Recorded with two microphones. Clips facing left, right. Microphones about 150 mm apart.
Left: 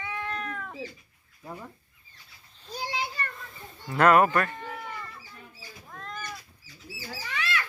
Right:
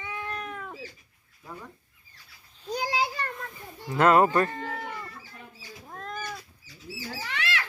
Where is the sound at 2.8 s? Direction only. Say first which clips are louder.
Right 4 dB; 90° right.